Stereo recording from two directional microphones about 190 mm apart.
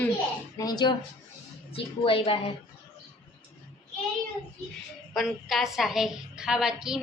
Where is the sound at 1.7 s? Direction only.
30° left (ahead or behind).